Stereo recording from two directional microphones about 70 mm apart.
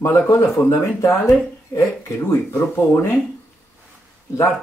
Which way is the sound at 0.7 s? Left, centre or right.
Left.